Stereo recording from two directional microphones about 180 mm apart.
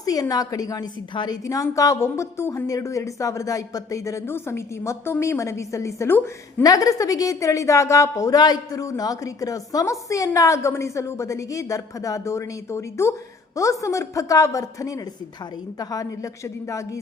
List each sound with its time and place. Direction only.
0.0 s a woman's voice: 20° left (ahead or behind)